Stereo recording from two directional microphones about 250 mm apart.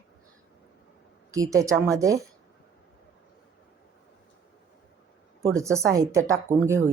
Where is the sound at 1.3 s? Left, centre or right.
Centre.